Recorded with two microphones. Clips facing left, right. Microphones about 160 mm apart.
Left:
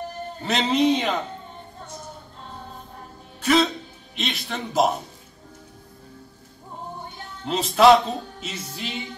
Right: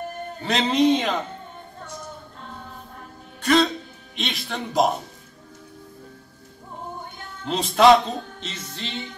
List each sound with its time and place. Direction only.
0.4 s music: centre (ahead or behind)
3.3 s music: centre (ahead or behind)
7.4 s music: centre (ahead or behind)